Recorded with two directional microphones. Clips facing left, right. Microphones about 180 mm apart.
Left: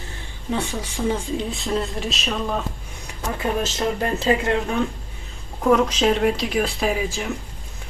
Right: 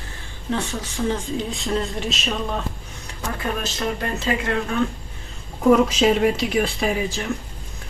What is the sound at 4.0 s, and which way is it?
Speech, 25° left (ahead or behind).